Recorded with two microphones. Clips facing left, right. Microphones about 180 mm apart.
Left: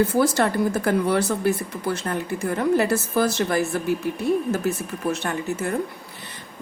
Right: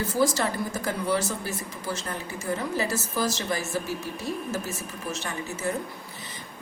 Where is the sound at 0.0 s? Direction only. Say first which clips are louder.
Left 5 dB; 60° left (ahead or behind).